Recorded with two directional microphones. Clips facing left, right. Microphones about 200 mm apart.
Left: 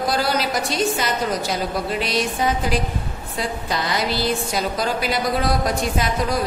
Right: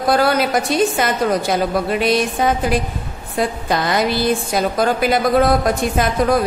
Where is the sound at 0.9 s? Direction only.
55° right (ahead or behind).